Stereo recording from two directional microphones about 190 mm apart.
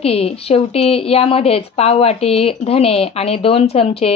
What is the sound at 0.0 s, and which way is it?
A woman's voice, 30° left (ahead or behind).